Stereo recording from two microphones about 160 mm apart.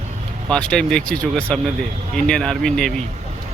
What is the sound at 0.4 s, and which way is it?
Speech, 5° left (ahead or behind).